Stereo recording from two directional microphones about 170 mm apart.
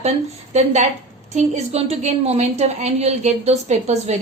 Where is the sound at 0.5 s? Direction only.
40° right (ahead or behind).